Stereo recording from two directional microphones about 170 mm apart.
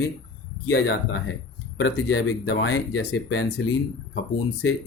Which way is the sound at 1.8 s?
90° left.